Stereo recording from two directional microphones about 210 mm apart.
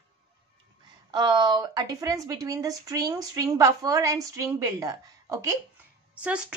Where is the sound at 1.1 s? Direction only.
20° right (ahead or behind).